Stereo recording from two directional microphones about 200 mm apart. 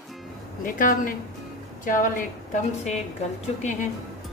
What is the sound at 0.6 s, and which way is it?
A woman's voice, 40° left (ahead or behind).